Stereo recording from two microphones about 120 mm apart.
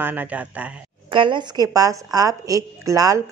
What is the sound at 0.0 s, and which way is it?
Speech, 15° right (ahead or behind).